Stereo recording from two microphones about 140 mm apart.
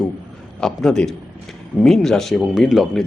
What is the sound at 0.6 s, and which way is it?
A man's voice, 5° left (ahead or behind).